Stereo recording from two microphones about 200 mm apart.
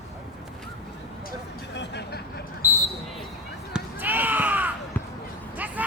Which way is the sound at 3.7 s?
10° right (ahead or behind).